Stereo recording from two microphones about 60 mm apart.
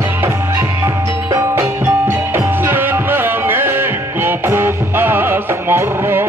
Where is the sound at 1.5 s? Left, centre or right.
Right.